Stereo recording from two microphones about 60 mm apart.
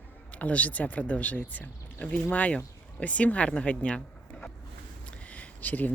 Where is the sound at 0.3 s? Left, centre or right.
Left.